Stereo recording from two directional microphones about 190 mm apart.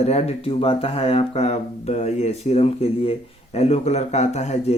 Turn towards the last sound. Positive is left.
turn(degrees=35)  # may be behind; listen again after turning